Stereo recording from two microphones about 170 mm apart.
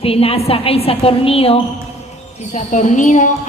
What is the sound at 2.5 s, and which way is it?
Speech, 45° left (ahead or behind).